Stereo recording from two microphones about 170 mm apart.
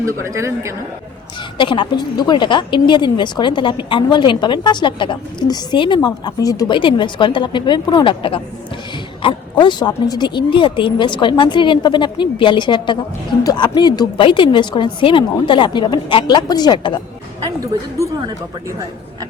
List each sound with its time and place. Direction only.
0.0 s speech: 15° right (ahead or behind)
1.5 s a woman's voice: 30° left (ahead or behind)